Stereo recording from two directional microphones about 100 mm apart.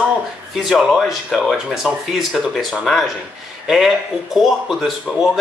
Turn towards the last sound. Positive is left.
turn(degrees=0)  # may be behind; listen again after turning